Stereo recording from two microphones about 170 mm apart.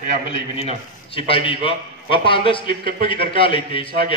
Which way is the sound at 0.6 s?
35° left (ahead or behind).